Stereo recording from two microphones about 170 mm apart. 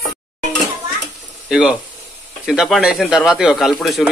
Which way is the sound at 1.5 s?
5° right (ahead or behind).